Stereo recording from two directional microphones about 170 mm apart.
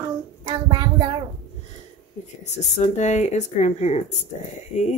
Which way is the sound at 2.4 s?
40° left (ahead or behind).